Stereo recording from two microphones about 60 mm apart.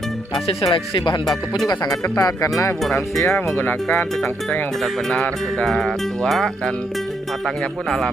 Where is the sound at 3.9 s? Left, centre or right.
Centre.